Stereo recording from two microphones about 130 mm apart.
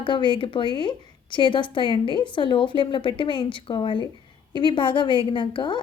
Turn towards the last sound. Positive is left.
turn(degrees=40)  # may be behind; listen again after turning